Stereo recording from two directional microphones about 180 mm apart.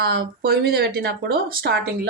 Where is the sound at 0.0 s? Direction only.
60° right (ahead or behind).